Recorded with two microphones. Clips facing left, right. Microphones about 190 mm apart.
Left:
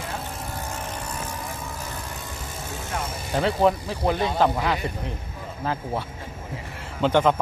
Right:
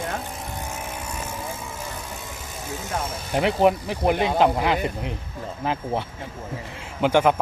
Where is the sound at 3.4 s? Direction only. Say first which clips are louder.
Right 2 dB; 15° right (ahead or behind).